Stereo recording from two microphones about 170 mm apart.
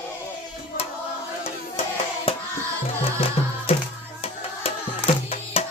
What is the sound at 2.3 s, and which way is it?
Hands, 35° left (ahead or behind).